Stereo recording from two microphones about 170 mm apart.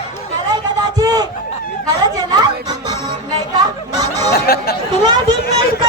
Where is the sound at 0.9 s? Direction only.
25° right (ahead or behind).